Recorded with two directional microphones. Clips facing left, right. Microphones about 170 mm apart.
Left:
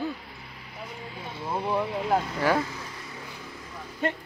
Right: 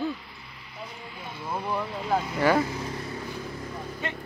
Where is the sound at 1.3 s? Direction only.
25° left (ahead or behind).